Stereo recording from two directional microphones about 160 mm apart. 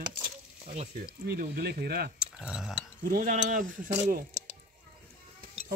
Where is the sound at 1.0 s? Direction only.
75° right (ahead or behind).